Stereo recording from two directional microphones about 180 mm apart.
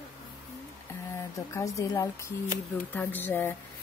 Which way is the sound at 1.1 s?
15° left (ahead or behind).